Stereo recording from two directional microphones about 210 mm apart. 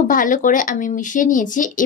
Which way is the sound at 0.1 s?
40° left (ahead or behind).